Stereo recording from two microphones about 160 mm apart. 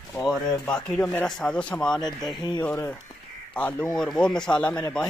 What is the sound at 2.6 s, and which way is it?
Speech, 10° left (ahead or behind).